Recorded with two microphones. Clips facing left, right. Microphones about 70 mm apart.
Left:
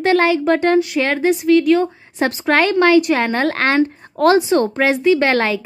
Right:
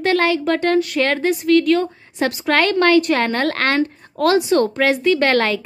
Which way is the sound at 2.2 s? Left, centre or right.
Left.